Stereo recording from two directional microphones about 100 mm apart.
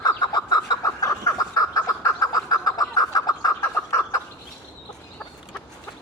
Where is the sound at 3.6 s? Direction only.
30° left (ahead or behind).